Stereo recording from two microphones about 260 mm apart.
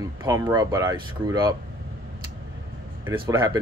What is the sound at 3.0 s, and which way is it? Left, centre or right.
Speech, centre.